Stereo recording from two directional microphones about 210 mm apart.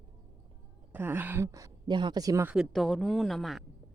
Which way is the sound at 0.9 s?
10° right (ahead or behind).